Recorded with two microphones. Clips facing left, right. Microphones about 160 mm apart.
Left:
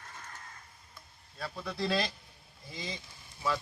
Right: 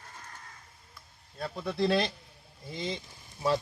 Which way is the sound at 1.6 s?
20° right (ahead or behind).